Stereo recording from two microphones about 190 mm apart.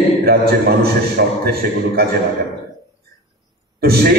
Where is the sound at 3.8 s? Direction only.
55° right (ahead or behind).